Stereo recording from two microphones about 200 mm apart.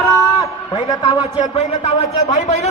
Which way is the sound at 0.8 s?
25° left (ahead or behind).